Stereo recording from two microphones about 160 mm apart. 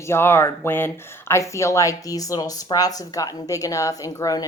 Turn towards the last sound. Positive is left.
turn(degrees=25)  # may be behind; listen again after turning